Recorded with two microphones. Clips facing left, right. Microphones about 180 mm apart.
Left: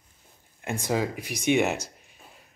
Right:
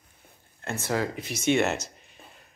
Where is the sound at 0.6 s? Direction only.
15° left (ahead or behind).